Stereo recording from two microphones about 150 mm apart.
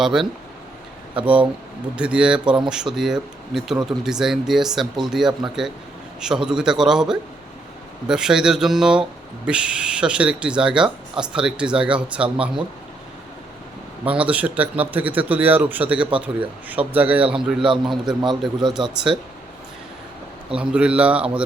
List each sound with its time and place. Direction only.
0.0 s speech: centre (ahead or behind)
14.0 s speech: 10° right (ahead or behind)
18.0 s a man's voice: 30° right (ahead or behind)
20.6 s speech: 10° right (ahead or behind)